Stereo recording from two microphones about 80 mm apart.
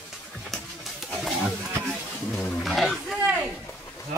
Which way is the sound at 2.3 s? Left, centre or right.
Centre.